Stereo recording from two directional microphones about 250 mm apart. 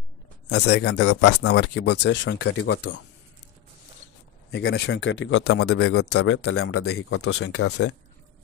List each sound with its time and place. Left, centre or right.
0.5 s speech: left
2.5 s speech: left
4.5 s speech: left